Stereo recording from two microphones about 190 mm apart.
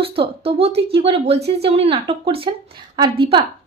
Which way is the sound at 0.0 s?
30° right (ahead or behind).